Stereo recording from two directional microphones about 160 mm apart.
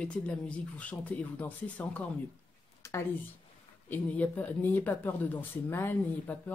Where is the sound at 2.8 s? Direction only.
20° left (ahead or behind).